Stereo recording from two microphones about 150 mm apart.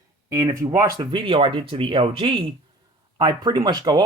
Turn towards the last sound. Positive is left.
turn(degrees=-25)  # may be behind; listen again after turning